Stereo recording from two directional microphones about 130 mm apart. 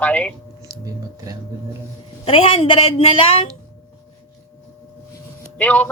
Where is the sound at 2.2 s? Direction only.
45° left (ahead or behind).